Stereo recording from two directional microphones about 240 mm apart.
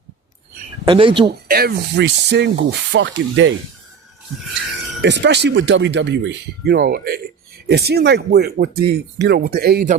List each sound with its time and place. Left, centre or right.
0.9 s speech: right
1.5 s speech: right
5.0 s speech: right